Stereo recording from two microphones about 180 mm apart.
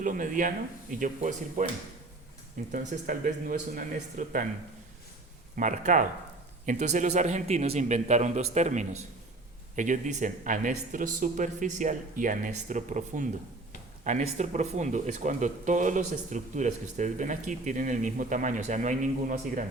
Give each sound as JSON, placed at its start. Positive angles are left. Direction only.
{"t": 0.0, "sound": "speech", "side_deg": -45}
{"t": 2.7, "sound": "speech", "side_deg": -50}
{"t": 5.5, "sound": "speech", "side_deg": -45}